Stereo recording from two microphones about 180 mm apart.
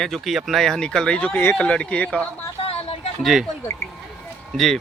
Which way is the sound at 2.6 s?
30° left (ahead or behind).